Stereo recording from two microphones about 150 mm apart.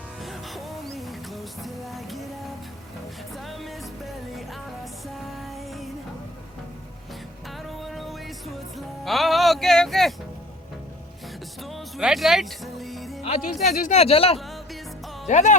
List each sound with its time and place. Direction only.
0.2 s music: centre (ahead or behind)
0.9 s a sound: centre (ahead or behind)
3.3 s music: centre (ahead or behind)
7.7 s music: centre (ahead or behind)
11.6 s music: centre (ahead or behind)
13.2 s speech: 50° left (ahead or behind)
15.3 s speech: 50° left (ahead or behind)